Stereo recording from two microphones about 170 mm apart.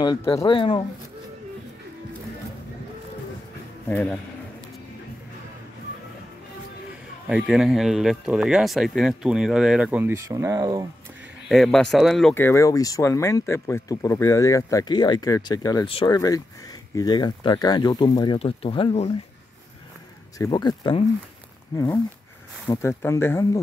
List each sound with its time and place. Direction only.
0.0 s speech: 20° left (ahead or behind)
3.9 s speech: 5° left (ahead or behind)
7.2 s speech: 5° right (ahead or behind); by 10.9 s 20° right (ahead or behind)
11.4 s speech: centre (ahead or behind)
12.4 s speech: 15° left (ahead or behind)
15.9 s speech: 35° left (ahead or behind)
20.3 s speech: 25° left (ahead or behind)